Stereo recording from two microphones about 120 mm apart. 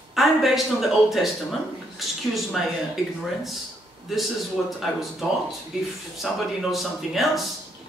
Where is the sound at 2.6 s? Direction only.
Centre (ahead or behind).